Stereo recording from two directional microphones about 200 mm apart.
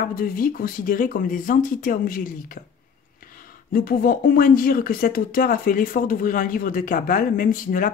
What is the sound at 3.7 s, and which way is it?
Speech, 45° left (ahead or behind).